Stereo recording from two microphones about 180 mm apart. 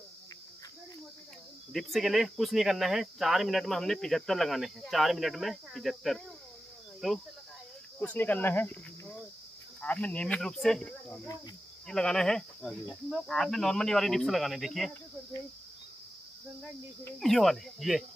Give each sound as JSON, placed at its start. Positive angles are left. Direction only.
{"t": 1.7, "sound": "speech", "side_deg": 0}
{"t": 8.0, "sound": "speech", "side_deg": 10}
{"t": 17.2, "sound": "speech", "side_deg": 0}